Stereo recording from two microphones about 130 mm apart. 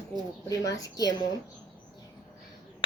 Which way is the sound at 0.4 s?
30° left (ahead or behind).